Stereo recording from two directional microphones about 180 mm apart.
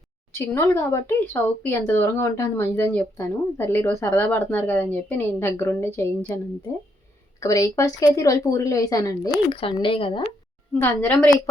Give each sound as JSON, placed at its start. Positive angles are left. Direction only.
{"t": 0.3, "sound": "speech", "side_deg": 15}
{"t": 10.8, "sound": "speech", "side_deg": 10}